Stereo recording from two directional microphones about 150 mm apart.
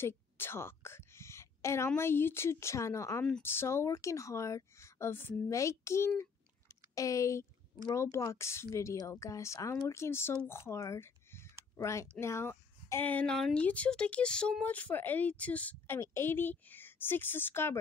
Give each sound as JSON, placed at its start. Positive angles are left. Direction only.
{"t": 0.0, "sound": "a woman's voice", "side_deg": 15}
{"t": 3.3, "sound": "speech", "side_deg": 5}
{"t": 3.5, "sound": "a woman's voice", "side_deg": 20}